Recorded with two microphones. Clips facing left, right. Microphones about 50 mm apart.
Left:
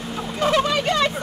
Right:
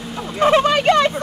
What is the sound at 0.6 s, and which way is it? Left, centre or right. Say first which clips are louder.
Speech: right 6 dB; right.